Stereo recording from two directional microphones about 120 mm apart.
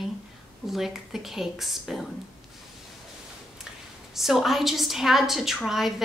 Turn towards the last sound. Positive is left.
turn(degrees=0)  # may be behind; listen again after turning